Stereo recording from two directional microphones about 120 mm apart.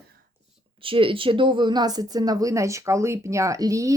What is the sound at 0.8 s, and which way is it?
A woman's voice, 45° right (ahead or behind).